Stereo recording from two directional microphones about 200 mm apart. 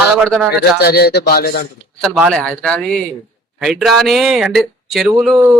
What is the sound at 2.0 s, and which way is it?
A man's voice, centre (ahead or behind).